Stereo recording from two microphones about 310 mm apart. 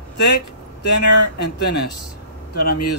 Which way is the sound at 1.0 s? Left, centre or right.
Left.